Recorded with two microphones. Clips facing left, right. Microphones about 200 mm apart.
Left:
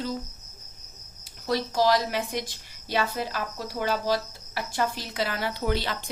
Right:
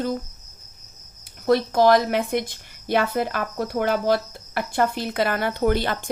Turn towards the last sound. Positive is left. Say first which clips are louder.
# right 7 dB
turn(degrees=-50)  # may be behind; listen again after turning